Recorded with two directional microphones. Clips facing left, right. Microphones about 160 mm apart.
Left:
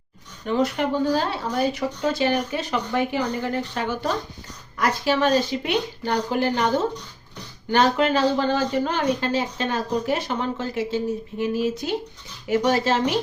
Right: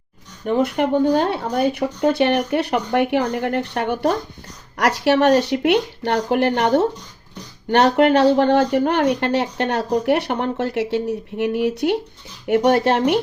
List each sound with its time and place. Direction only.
0.4 s speech: 55° right (ahead or behind)
4.8 s speech: 85° right; by 13.1 s 60° right (ahead or behind)